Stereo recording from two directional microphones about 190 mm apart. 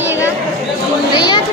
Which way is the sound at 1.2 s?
25° left (ahead or behind).